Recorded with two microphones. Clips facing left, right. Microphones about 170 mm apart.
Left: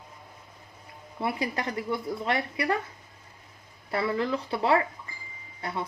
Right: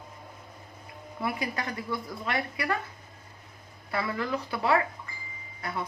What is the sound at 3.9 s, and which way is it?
Speech, 30° left (ahead or behind).